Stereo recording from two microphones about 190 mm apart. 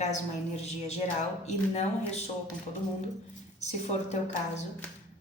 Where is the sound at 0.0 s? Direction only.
35° left (ahead or behind).